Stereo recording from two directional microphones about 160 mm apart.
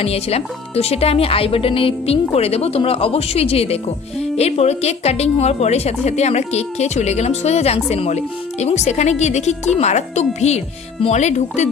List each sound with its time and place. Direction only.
0.0 s a woman's voice: 40° left (ahead or behind)